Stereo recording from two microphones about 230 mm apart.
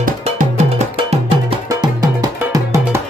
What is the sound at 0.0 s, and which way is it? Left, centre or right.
Music, right.